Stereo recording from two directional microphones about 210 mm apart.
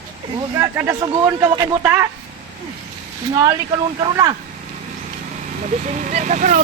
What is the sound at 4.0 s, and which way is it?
Speech, 20° right (ahead or behind).